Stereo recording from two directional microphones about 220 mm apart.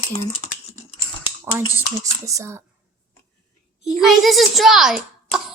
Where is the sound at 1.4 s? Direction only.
10° right (ahead or behind).